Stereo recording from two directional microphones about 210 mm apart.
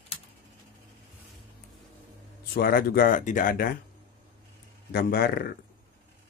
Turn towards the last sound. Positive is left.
turn(degrees=45)  # may be behind; listen again after turning